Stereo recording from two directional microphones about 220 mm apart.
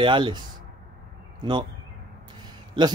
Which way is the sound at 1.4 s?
20° right (ahead or behind).